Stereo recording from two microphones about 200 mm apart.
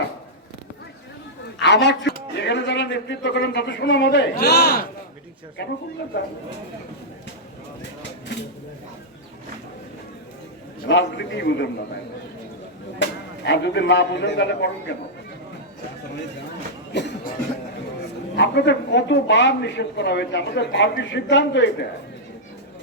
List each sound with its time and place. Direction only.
1.5 s a man's voice: 60° left (ahead or behind)
10.8 s a man's voice: 60° left (ahead or behind)
13.0 s a man's voice: 60° left (ahead or behind)
16.9 s a man's voice: 60° left (ahead or behind)
18.3 s a man's voice: 60° left (ahead or behind)